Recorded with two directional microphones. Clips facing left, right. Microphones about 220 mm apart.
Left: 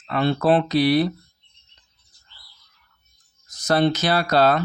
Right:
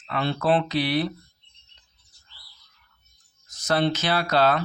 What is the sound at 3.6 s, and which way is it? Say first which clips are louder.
Speech: left 4 dB; 40° left (ahead or behind).